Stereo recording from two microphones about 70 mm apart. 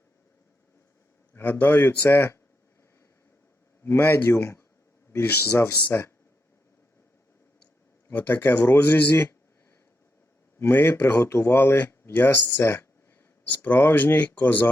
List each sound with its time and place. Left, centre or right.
1.3 s speech: left
3.8 s speech: left
8.1 s speech: left
10.6 s speech: left